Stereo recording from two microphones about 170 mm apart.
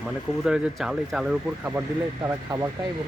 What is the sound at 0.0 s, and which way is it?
Speech, 5° right (ahead or behind).